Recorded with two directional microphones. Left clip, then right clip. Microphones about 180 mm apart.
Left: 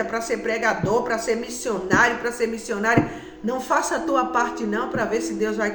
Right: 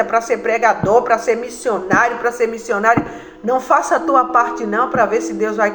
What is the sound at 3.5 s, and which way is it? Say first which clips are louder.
A man's voice: right 8 dB; 35° left (ahead or behind).